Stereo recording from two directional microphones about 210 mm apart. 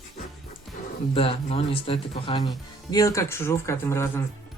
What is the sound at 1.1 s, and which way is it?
Speech, 25° left (ahead or behind).